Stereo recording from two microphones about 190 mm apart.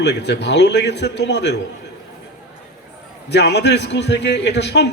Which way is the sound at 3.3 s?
65° left (ahead or behind).